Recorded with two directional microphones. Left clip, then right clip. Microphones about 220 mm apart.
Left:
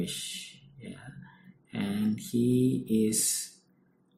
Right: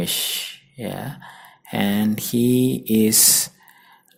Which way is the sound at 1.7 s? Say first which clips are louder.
Right 11 dB; 45° right (ahead or behind).